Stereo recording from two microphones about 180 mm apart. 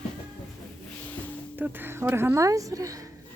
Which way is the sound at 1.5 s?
10° right (ahead or behind).